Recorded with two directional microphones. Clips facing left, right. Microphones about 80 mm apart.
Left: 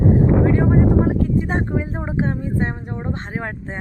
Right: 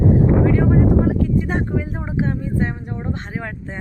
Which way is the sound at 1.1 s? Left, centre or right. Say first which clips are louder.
Even; left.